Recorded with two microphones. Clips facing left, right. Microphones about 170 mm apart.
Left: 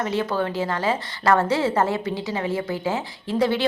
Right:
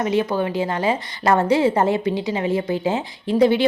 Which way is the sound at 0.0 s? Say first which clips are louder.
Right 4 dB; 15° right (ahead or behind).